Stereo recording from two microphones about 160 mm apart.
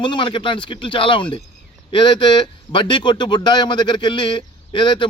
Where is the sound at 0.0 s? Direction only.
30° left (ahead or behind).